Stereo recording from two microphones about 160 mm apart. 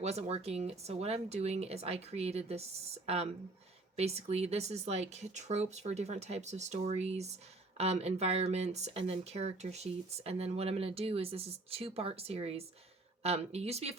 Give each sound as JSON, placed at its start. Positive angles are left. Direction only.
{"t": 0.0, "sound": "speech", "side_deg": -40}